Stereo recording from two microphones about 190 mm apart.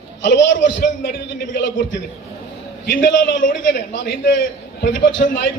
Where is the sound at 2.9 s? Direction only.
45° left (ahead or behind).